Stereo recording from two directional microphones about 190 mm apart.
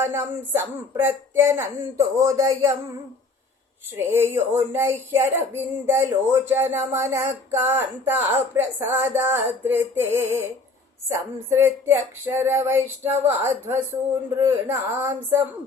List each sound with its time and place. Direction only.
0.0 s female singing: 10° right (ahead or behind)
3.9 s female singing: 15° right (ahead or behind)